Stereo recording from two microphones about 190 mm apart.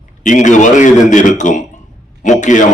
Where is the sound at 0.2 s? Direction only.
40° left (ahead or behind).